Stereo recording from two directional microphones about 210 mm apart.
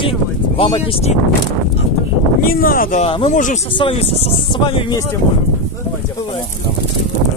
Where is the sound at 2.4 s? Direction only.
45° left (ahead or behind).